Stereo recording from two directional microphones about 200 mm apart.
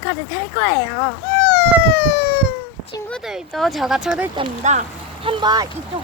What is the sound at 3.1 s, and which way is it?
Speech, centre (ahead or behind).